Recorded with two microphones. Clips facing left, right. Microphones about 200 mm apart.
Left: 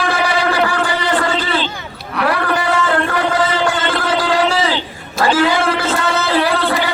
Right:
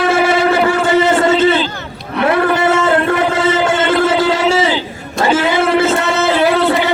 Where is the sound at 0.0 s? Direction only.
25° right (ahead or behind).